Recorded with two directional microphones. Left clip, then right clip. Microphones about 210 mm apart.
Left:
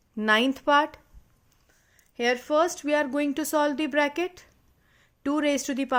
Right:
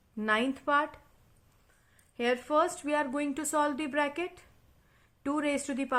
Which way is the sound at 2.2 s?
35° left (ahead or behind).